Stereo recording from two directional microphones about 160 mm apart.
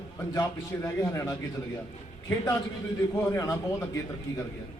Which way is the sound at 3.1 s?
15° left (ahead or behind).